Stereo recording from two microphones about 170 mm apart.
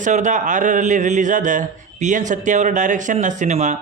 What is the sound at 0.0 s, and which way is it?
A man's voice, 45° right (ahead or behind).